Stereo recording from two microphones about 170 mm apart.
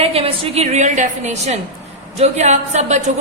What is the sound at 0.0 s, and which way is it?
A woman's voice, 35° right (ahead or behind).